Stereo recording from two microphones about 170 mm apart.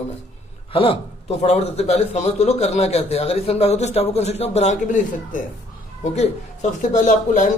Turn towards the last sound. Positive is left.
turn(degrees=45)  # may be behind; listen again after turning